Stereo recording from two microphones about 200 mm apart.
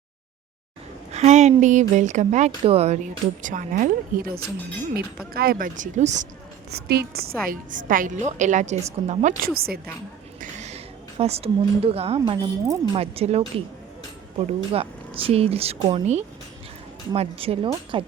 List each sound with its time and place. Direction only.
1.1 s a woman's voice: 35° right (ahead or behind)
6.7 s a woman's voice: 55° right (ahead or behind)
10.4 s a sound: 35° right (ahead or behind)
11.2 s speech: 30° right (ahead or behind)
12.9 s speech: 30° right (ahead or behind)